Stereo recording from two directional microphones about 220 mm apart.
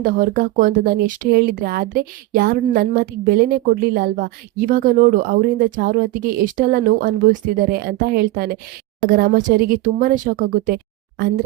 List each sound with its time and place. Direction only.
0.0 s speech: 40° right (ahead or behind)